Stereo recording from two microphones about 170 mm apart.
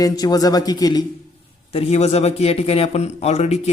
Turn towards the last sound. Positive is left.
turn(degrees=40)  # may be behind; listen again after turning